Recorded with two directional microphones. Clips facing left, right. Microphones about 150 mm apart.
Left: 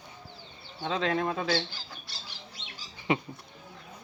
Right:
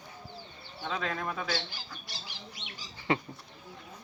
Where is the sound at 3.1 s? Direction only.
15° left (ahead or behind).